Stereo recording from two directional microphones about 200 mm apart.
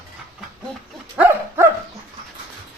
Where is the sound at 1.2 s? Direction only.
10° right (ahead or behind).